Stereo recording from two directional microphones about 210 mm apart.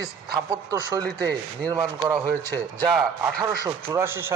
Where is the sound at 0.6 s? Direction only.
15° right (ahead or behind).